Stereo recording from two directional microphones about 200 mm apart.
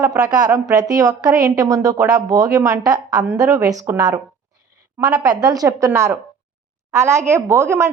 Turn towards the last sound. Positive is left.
turn(degrees=-15)  # may be behind; listen again after turning